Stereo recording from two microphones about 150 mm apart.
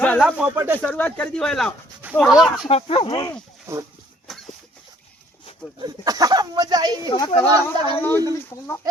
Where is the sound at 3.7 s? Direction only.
20° right (ahead or behind).